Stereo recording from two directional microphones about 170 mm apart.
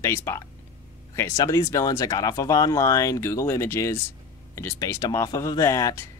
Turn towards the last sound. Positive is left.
turn(degrees=15)  # may be behind; listen again after turning